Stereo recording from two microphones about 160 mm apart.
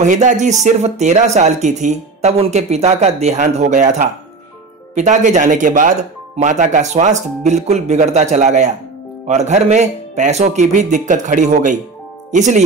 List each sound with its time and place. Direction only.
0.0 s speech: 50° right (ahead or behind)